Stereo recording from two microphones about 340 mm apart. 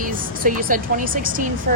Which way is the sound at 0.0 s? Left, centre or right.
Right.